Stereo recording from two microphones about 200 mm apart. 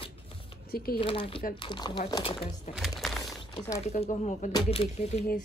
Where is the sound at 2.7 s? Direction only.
Centre (ahead or behind).